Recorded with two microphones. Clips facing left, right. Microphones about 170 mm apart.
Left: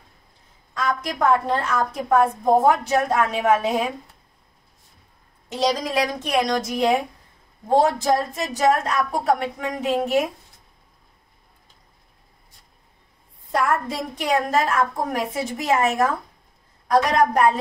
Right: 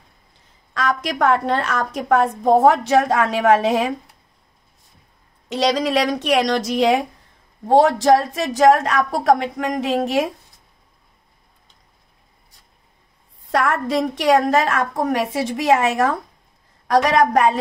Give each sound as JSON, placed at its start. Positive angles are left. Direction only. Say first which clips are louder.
{"t": 0.7, "sound": "a woman's voice", "louder": "right 3 dB", "side_deg": -80}
{"t": 5.5, "sound": "a woman's voice", "louder": "right 4 dB", "side_deg": -75}
{"t": 13.5, "sound": "a woman's voice", "louder": "right 3 dB", "side_deg": -80}